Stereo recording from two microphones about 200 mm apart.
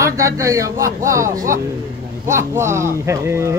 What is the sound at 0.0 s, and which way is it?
Speech, 15° right (ahead or behind).